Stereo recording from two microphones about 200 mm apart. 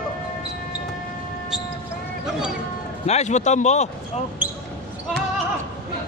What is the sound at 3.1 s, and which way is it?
Speech, 35° left (ahead or behind).